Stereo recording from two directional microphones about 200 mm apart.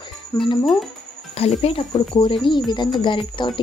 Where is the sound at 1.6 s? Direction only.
25° left (ahead or behind).